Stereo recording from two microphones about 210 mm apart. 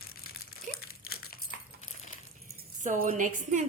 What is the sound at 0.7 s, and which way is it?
Crumpling, 40° right (ahead or behind).